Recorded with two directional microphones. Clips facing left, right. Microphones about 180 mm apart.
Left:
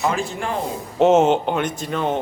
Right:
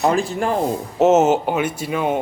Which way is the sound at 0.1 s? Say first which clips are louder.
Right 5 dB; 40° right (ahead or behind).